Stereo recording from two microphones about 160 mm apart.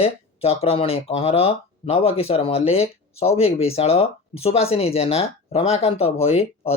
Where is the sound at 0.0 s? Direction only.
40° left (ahead or behind).